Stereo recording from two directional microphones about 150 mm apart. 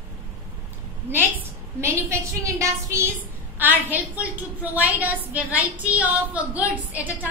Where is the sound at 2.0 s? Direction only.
20° right (ahead or behind).